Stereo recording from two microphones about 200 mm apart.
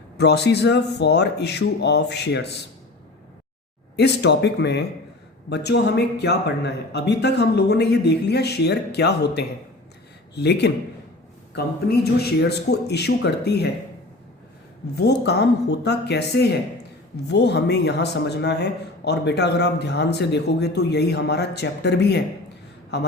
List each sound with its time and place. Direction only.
0.2 s speech: 55° left (ahead or behind)
3.9 s speech: 55° left (ahead or behind)
14.9 s speech: 55° left (ahead or behind)